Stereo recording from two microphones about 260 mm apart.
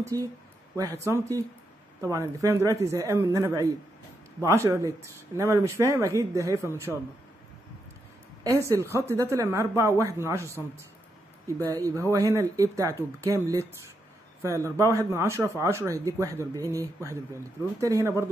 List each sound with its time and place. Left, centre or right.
0.1 s speech: centre
8.5 s speech: centre